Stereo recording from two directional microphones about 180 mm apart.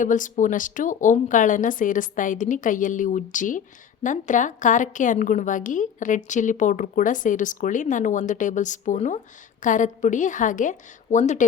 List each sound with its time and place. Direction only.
0.0 s a woman's voice: 45° left (ahead or behind)